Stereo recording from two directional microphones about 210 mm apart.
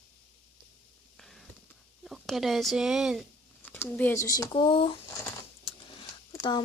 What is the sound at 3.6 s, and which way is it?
Speech, 10° left (ahead or behind).